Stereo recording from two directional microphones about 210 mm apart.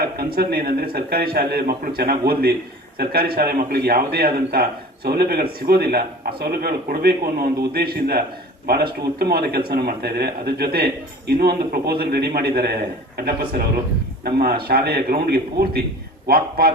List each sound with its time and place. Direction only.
0.0 s a man's voice: 45° right (ahead or behind)